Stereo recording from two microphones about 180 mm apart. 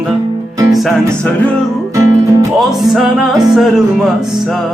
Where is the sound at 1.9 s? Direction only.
15° right (ahead or behind).